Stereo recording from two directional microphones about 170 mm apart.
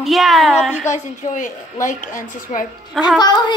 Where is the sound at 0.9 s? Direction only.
50° left (ahead or behind).